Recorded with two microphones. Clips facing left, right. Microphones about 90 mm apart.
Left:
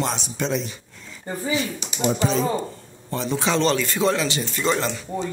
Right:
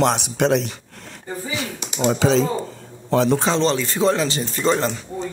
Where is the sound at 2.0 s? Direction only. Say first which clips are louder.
Right 4 dB; 90° right.